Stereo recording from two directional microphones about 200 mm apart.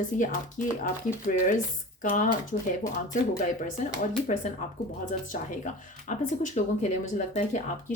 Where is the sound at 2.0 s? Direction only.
40° left (ahead or behind).